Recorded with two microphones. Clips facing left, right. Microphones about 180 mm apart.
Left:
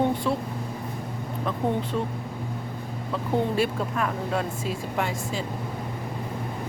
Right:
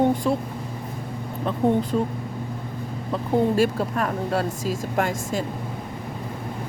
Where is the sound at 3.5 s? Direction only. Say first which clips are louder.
Right 4 dB; 40° right (ahead or behind).